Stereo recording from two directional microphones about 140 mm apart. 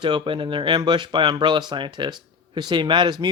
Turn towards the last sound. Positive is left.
turn(degrees=-35)  # may be behind; listen again after turning